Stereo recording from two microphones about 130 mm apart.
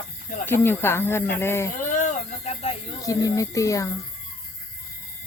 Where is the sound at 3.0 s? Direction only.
25° left (ahead or behind).